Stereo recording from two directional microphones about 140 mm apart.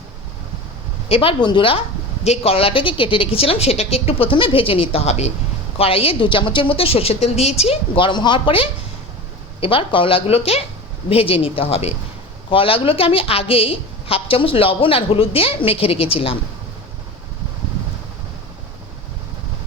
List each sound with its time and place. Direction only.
1.0 s a woman's voice: 40° left (ahead or behind)
2.2 s a woman's voice: 45° left (ahead or behind)